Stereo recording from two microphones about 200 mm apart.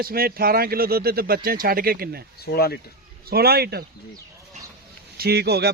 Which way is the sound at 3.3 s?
50° right (ahead or behind).